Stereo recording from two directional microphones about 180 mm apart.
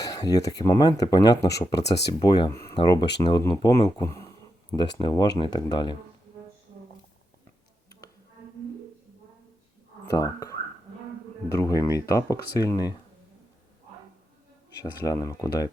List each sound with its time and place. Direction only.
0.0 s speech: 20° left (ahead or behind)
1.7 s speech: 70° left (ahead or behind)
2.2 s speech: 25° left (ahead or behind)
10.1 s speech: 20° left (ahead or behind)
14.8 s speech: 20° left (ahead or behind)